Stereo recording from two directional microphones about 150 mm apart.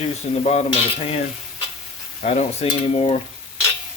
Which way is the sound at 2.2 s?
45° left (ahead or behind).